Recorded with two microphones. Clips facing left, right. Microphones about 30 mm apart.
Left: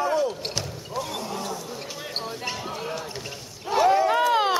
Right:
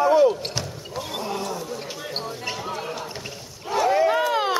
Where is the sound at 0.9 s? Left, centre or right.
Centre.